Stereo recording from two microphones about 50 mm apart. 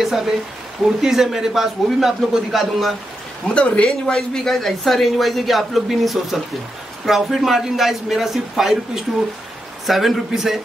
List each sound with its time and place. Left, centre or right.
0.0 s a sound: centre
0.8 s a man's voice: centre
3.4 s a man's voice: left; by 10.6 s centre